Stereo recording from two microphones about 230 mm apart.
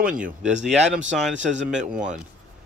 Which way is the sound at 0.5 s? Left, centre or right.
Right.